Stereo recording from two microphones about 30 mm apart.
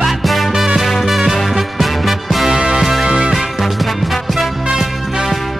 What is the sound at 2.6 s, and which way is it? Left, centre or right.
Music, right.